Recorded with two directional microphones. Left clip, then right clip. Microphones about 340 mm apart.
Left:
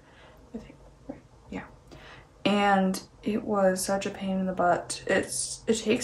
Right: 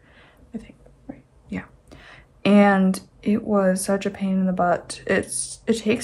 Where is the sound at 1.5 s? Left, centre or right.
Right.